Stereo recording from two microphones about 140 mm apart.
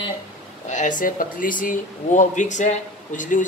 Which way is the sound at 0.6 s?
60° left (ahead or behind).